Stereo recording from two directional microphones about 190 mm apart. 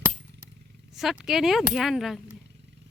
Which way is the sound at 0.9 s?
Centre (ahead or behind).